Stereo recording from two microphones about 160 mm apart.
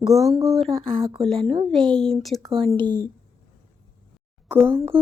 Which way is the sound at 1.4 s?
35° right (ahead or behind).